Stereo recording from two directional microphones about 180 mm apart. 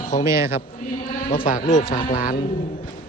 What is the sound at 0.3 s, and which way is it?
Speech, 15° right (ahead or behind).